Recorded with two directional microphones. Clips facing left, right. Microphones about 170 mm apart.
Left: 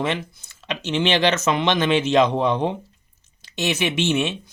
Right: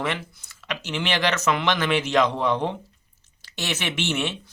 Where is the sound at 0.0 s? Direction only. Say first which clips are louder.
Left 4 dB; 25° left (ahead or behind).